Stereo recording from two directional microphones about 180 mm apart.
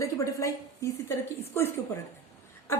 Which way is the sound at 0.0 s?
15° left (ahead or behind).